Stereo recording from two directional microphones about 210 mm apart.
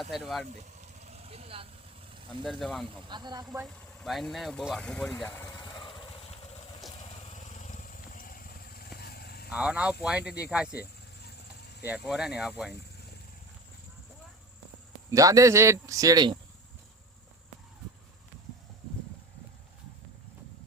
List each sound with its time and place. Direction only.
0.0 s speech: centre (ahead or behind)
0.8 s vehicle: 30° right (ahead or behind)
2.4 s speech: centre (ahead or behind)
3.1 s speech: 20° right (ahead or behind)
4.0 s speech: centre (ahead or behind)
5.5 s vehicle: 20° left (ahead or behind)
7.2 s vehicle: 35° left (ahead or behind)
9.5 s speech: 5° right (ahead or behind)
11.3 s a sound: 50° left (ahead or behind)
11.9 s speech: 5° right (ahead or behind)
15.1 s speech: 15° right (ahead or behind)